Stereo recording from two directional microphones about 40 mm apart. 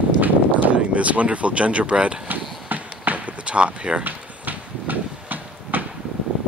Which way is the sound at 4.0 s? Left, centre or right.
Right.